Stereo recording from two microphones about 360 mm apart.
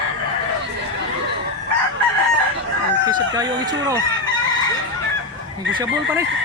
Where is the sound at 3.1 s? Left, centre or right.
Centre.